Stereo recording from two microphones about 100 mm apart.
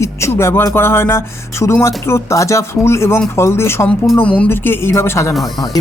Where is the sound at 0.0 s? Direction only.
25° left (ahead or behind).